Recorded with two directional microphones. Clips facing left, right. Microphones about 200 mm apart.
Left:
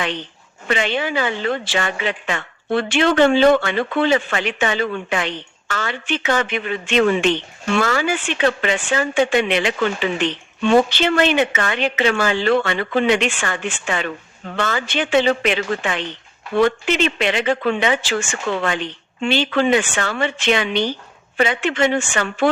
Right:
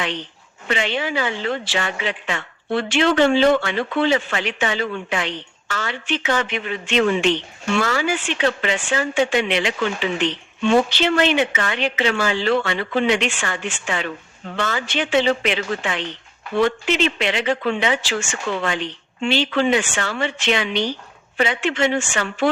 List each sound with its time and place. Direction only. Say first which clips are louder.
0.7 s speech: left 2 dB; 50° left (ahead or behind)